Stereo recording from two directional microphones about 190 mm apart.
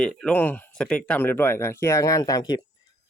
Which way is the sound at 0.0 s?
5° left (ahead or behind).